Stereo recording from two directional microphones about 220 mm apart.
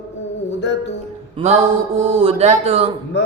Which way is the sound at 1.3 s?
30° right (ahead or behind).